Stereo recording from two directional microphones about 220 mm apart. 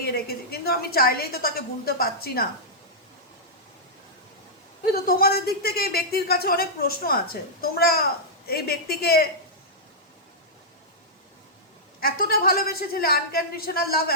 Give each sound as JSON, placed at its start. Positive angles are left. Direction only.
{"t": 0.0, "sound": "a woman's voice", "side_deg": 45}
{"t": 4.9, "sound": "a woman's voice", "side_deg": 45}
{"t": 11.9, "sound": "a woman's voice", "side_deg": 45}